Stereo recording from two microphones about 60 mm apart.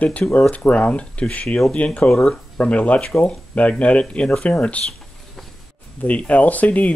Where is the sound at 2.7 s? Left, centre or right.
Left.